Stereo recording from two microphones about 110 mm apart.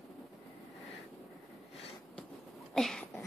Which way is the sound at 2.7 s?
5° left (ahead or behind).